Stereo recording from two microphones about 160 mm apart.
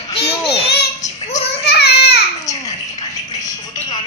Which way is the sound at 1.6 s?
90° left.